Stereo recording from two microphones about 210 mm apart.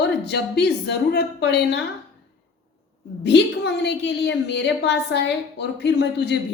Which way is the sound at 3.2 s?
55° left (ahead or behind).